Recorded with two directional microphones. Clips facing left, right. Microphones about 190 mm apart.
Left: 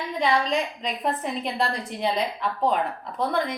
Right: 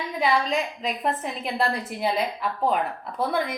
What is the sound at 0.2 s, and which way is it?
A woman's voice, 5° right (ahead or behind).